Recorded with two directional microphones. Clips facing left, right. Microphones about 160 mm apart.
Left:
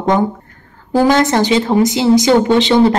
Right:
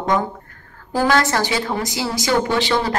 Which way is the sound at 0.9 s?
20° left (ahead or behind).